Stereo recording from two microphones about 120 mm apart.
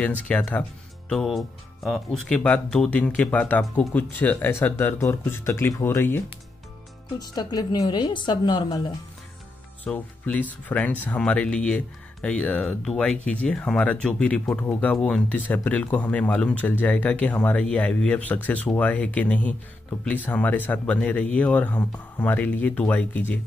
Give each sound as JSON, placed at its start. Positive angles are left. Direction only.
{"t": 0.5, "sound": "speech", "side_deg": 15}
{"t": 1.1, "sound": "speech", "side_deg": 0}
{"t": 7.2, "sound": "a woman's voice", "side_deg": 35}
{"t": 9.8, "sound": "speech", "side_deg": 10}